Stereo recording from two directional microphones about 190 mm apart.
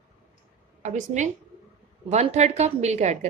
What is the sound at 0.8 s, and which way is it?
A woman's voice, 40° right (ahead or behind).